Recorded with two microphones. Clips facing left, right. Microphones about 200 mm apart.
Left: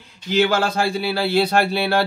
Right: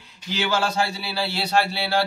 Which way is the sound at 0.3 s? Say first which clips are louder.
Left 6 dB; 55° left (ahead or behind).